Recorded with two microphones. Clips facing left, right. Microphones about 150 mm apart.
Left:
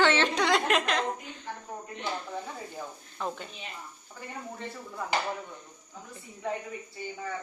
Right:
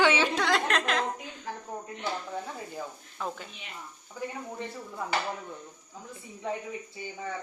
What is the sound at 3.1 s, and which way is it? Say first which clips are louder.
Speech: left 1 dB; centre (ahead or behind).